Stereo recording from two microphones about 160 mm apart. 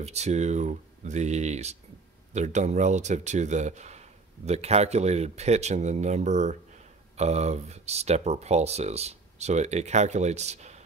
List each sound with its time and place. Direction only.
0.0 s speech: 45° right (ahead or behind)